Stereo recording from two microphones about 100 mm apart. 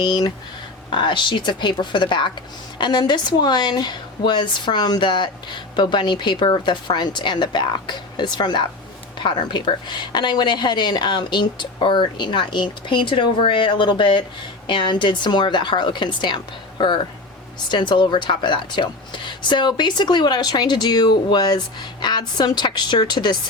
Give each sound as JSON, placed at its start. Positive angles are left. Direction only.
{"t": 0.0, "sound": "speech", "side_deg": 45}